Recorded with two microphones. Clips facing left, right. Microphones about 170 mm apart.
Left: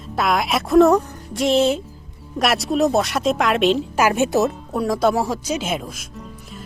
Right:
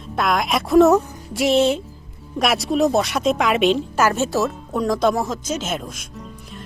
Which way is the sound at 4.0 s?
15° left (ahead or behind).